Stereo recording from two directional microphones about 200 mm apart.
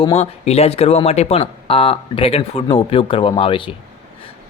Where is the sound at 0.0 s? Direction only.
30° left (ahead or behind).